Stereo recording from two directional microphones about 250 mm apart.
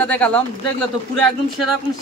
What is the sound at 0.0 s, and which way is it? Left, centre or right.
Speech, centre.